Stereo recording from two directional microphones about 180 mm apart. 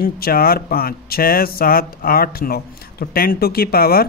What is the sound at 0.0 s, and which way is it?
Speech, 55° left (ahead or behind).